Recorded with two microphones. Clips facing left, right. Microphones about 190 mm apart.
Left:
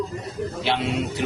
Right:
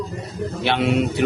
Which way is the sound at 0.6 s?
65° right (ahead or behind).